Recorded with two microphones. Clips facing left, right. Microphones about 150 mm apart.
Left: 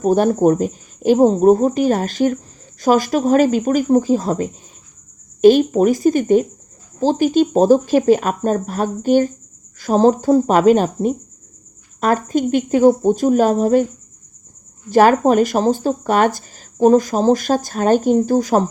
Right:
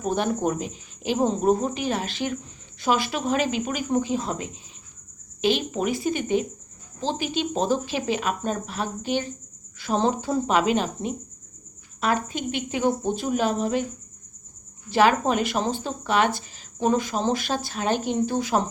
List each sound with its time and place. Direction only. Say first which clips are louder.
0.0 s speech: left 10 dB; 40° left (ahead or behind)
14.8 s speech: left 8 dB; 45° left (ahead or behind)